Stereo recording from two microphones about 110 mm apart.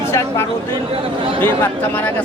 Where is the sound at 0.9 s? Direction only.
55° right (ahead or behind).